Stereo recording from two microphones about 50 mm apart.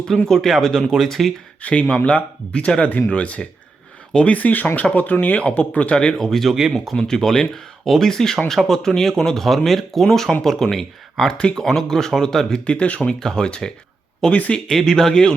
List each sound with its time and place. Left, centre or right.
0.3 s speech: centre
1.6 s speech: left
4.4 s speech: left
6.1 s speech: centre
6.9 s speech: centre
14.3 s speech: left
14.7 s speech: centre